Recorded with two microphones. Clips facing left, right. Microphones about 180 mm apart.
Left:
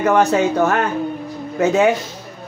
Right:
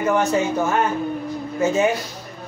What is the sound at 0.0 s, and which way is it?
Speech, 70° left (ahead or behind).